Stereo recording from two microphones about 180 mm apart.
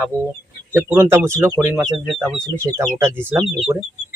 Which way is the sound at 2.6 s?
15° right (ahead or behind).